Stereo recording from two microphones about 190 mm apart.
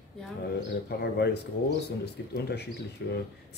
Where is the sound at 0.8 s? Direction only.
60° left (ahead or behind).